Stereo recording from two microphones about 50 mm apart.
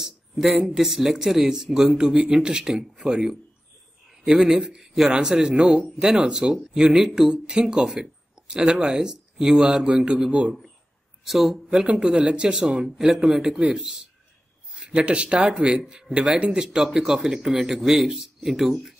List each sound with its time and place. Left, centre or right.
0.0 s a man's voice: centre
11.2 s speech: centre
11.7 s speech: centre